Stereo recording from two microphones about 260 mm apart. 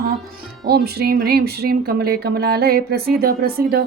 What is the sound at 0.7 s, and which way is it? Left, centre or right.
Speech, right.